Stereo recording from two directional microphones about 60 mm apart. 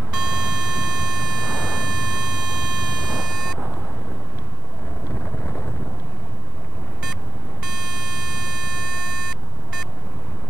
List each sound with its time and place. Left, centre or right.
0.1 s a sound: centre
5.2 s vehicle: left
7.6 s beep: centre